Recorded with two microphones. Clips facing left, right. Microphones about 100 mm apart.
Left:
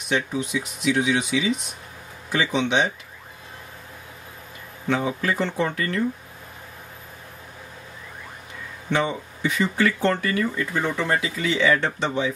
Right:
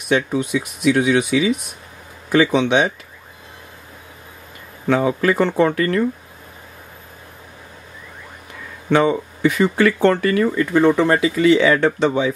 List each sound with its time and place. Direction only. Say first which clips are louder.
0.1 s speech: right 6 dB; 55° right (ahead or behind)
4.8 s speech: right 7 dB; 60° right (ahead or behind)
8.9 s speech: right 8 dB; 60° right (ahead or behind)